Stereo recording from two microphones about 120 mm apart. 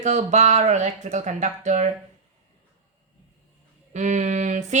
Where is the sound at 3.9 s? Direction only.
85° right.